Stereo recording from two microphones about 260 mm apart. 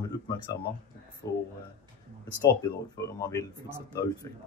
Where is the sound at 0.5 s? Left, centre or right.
Centre.